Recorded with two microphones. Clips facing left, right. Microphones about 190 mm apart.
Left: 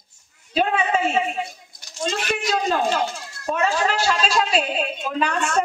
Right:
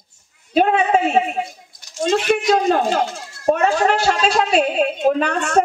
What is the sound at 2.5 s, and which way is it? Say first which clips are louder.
Speech: right 5 dB; 50° right (ahead or behind).